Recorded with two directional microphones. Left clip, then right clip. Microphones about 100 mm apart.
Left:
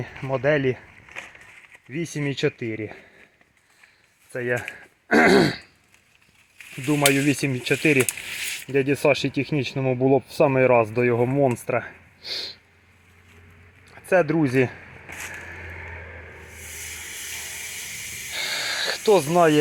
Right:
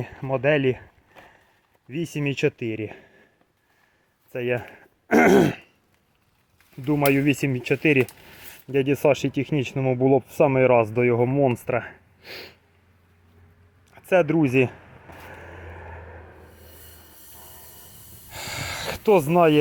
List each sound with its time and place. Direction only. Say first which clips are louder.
0.0 s speech: even; 30° right (ahead or behind)
1.9 s speech: right 1 dB; 40° right (ahead or behind)
4.3 s speech: even; 40° right (ahead or behind)
4.7 s throat clearing: left 1 dB; 45° right (ahead or behind)
6.8 s speech: left 1 dB; 35° right (ahead or behind)
10.8 s speech: even; 40° right (ahead or behind)
11.3 s speech: even; 25° right (ahead or behind)
12.2 s a sound: left 8 dB; 50° right (ahead or behind)
13.9 s a sound: even; 65° right (ahead or behind)
14.4 s a sound: right 1 dB; 45° right (ahead or behind)
18.3 s a sound: left 5 dB; 25° right (ahead or behind)
19.3 s speech: even; 25° right (ahead or behind)